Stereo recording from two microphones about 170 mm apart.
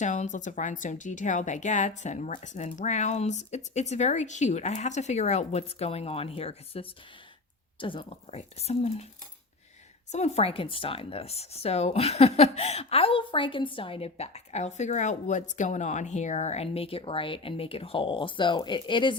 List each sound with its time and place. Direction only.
0.0 s speech: 45° left (ahead or behind)
10.1 s speech: 40° left (ahead or behind)